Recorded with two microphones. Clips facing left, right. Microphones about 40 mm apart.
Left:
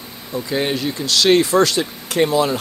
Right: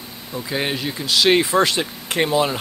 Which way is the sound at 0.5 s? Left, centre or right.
Centre.